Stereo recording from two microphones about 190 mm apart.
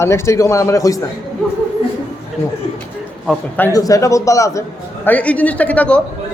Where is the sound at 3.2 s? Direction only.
Centre (ahead or behind).